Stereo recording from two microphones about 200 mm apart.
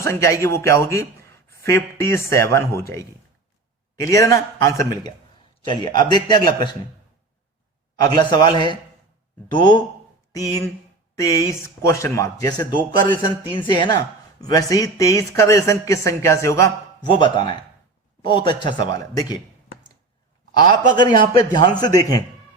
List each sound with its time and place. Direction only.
0.0 s speech: 15° left (ahead or behind)
4.0 s a man's voice: 15° left (ahead or behind)
8.1 s a man's voice: 20° left (ahead or behind)
11.1 s a man's voice: 15° left (ahead or behind)
20.9 s a man's voice: 20° left (ahead or behind)